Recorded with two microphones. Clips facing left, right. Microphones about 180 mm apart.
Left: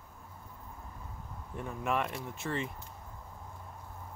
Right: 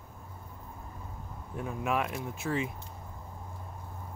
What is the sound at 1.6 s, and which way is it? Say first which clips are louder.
Speech: right 2 dB; 5° right (ahead or behind).